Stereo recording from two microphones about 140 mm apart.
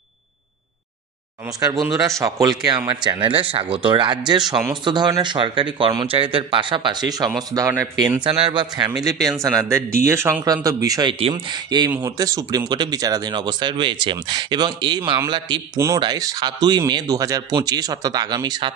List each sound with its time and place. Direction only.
2.0 s speech: 25° right (ahead or behind)
8.3 s speech: 40° right (ahead or behind)